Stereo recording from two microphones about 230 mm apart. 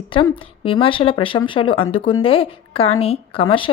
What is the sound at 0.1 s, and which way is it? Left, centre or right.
Speech, left.